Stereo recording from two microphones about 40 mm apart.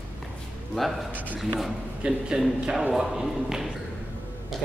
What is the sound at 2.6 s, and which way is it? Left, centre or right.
Speech, centre.